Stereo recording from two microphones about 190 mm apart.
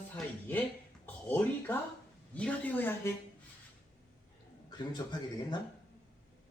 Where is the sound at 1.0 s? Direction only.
10° left (ahead or behind).